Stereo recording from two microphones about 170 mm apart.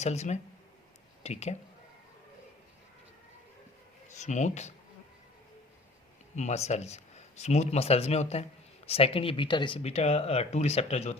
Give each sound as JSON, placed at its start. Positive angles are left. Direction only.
{"t": 0.0, "sound": "speech", "side_deg": 40}
{"t": 4.1, "sound": "speech", "side_deg": 45}
{"t": 6.3, "sound": "speech", "side_deg": 40}